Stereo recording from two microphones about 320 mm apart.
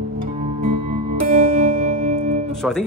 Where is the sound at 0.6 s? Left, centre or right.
Right.